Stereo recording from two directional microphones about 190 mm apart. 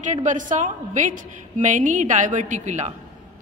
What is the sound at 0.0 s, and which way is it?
A woman's voice, 40° right (ahead or behind).